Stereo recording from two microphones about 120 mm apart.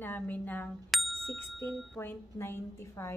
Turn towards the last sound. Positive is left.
turn(degrees=20)  # may be behind; listen again after turning